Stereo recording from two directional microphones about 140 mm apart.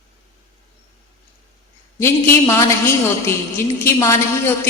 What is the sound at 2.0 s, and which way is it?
A woman's voice, 20° left (ahead or behind).